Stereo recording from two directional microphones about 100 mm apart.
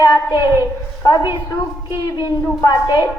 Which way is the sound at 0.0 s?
50° left (ahead or behind).